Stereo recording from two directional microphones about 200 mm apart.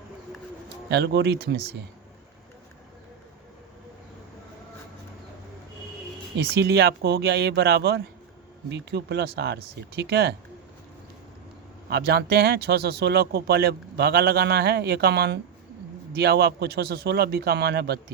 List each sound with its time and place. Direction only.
0.9 s speech: 60° right (ahead or behind)
6.3 s speech: 55° right (ahead or behind)
11.9 s speech: 55° right (ahead or behind)